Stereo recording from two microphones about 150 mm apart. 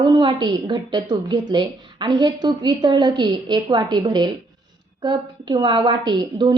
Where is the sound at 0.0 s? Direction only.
30° right (ahead or behind).